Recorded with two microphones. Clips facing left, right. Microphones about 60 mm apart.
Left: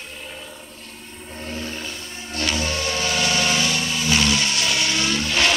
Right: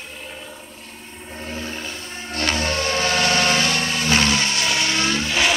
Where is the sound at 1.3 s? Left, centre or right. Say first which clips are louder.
Right 1 dB; right.